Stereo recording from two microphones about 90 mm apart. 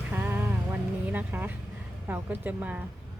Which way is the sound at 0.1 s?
20° right (ahead or behind).